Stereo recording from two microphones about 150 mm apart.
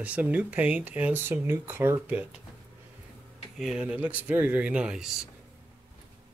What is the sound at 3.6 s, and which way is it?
Speech, 5° right (ahead or behind).